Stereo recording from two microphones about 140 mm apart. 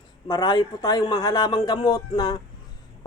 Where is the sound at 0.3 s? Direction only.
30° left (ahead or behind).